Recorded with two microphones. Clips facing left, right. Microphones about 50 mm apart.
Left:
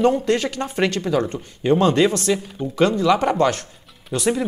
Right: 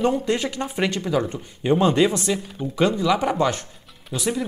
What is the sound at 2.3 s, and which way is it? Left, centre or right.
Speech, centre.